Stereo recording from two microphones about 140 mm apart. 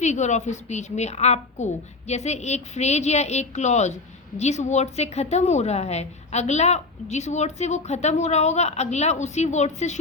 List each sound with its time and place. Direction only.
0.0 s a woman's voice: 55° left (ahead or behind)